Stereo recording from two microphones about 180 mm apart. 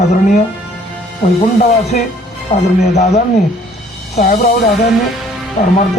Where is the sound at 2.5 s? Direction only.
40° left (ahead or behind).